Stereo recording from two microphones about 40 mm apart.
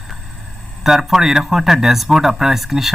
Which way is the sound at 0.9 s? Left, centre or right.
Centre.